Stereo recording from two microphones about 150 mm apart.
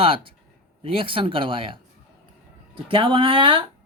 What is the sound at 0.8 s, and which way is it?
Speech, 35° right (ahead or behind).